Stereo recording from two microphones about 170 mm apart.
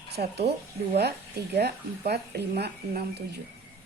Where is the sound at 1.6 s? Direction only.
70° right (ahead or behind).